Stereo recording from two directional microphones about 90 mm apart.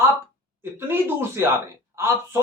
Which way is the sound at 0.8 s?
25° right (ahead or behind).